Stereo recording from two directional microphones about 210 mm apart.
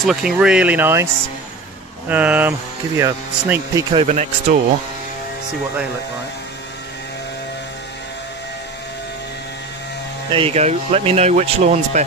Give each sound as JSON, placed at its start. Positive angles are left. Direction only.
{"t": 0.0, "sound": "speech", "side_deg": 0}
{"t": 2.0, "sound": "speech", "side_deg": -5}
{"t": 3.9, "sound": "speech", "side_deg": -30}
{"t": 10.3, "sound": "speech", "side_deg": -30}